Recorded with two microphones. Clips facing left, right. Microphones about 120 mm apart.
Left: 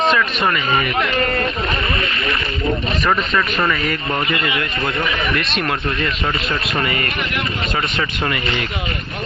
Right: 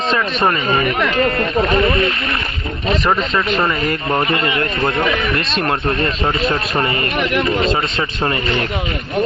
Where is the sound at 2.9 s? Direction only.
25° right (ahead or behind).